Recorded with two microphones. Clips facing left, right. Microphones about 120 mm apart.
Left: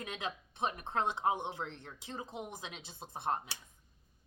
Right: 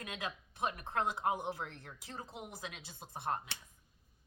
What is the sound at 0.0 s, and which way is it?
A woman's voice, 25° left (ahead or behind).